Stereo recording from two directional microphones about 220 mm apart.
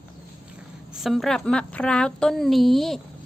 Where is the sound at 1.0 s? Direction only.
Centre (ahead or behind).